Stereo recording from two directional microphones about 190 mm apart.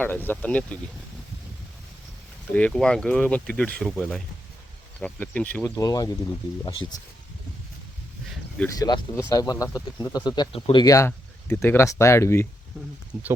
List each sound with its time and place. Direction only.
0.0 s speech: 10° left (ahead or behind)
2.5 s speech: 5° left (ahead or behind)
8.5 s speech: 15° left (ahead or behind)
13.1 s speech: 5° right (ahead or behind)